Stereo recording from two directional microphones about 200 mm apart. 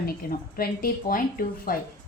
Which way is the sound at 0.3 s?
50° left (ahead or behind).